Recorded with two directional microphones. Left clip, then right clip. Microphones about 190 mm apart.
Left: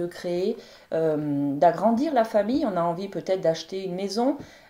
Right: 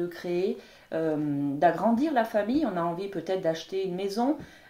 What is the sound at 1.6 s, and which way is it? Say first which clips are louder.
A woman's voice: left 3 dB; 40° left (ahead or behind).